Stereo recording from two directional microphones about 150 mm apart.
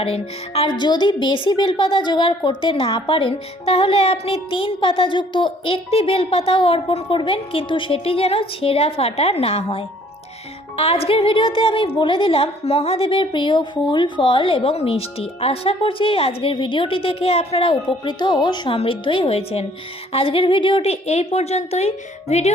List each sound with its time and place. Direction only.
0.0 s a child's voice: 40° left (ahead or behind)
18.0 s a woman's voice: 30° left (ahead or behind); by 22.5 s 45° left (ahead or behind)